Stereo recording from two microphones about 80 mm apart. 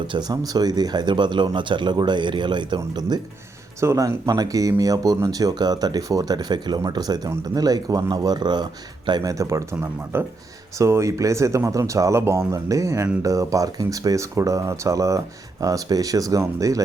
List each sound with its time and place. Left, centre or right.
0.1 s speech: right
3.8 s speech: right
9.2 s speech: right